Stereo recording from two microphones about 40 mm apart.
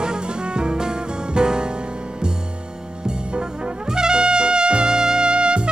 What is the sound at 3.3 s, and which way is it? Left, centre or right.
Brass instrument, right.